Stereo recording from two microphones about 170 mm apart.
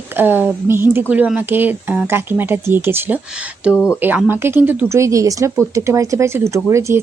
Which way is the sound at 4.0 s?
10° right (ahead or behind).